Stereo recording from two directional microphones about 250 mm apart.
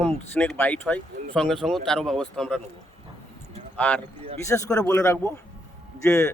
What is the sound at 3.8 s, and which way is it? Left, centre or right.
Speech, centre.